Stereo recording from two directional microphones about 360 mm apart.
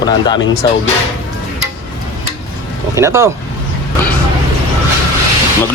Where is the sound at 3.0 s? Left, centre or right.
Centre.